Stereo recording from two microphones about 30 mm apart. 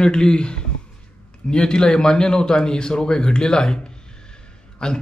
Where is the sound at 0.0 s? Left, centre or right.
Left.